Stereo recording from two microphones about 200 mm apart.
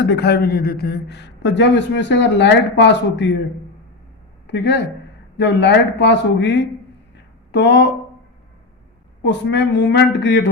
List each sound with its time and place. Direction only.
0.1 s a man's voice: 55° left (ahead or behind)
4.4 s a man's voice: 60° left (ahead or behind)
9.2 s a man's voice: 60° left (ahead or behind)